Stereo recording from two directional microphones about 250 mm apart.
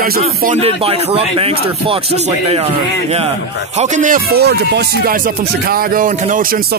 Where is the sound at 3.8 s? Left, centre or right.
Right.